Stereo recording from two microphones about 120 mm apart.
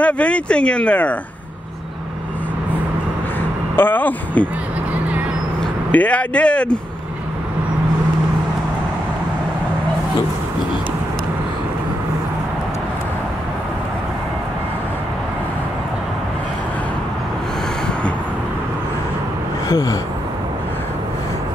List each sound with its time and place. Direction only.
0.0 s speech: 10° left (ahead or behind)
3.7 s speech: 15° left (ahead or behind)
5.9 s speech: 10° left (ahead or behind)
19.7 s speech: 30° left (ahead or behind)